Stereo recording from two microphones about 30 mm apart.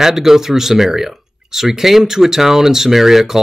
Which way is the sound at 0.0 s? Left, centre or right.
Centre.